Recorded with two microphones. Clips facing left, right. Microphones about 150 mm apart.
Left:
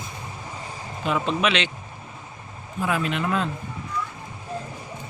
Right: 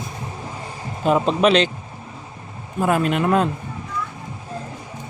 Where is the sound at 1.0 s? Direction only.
40° right (ahead or behind).